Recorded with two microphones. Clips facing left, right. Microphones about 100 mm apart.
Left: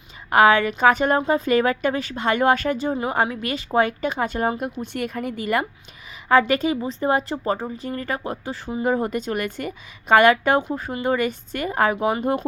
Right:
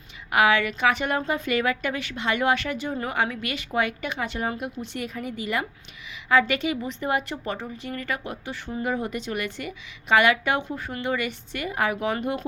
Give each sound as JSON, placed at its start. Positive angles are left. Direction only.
{"t": 0.3, "sound": "a woman's voice", "side_deg": 45}
{"t": 4.9, "sound": "a woman's voice", "side_deg": 55}